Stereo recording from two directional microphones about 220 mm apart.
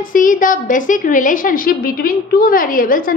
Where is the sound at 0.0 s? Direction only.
40° left (ahead or behind).